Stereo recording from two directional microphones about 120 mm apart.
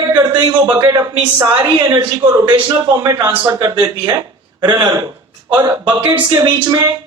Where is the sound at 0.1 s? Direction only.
35° right (ahead or behind).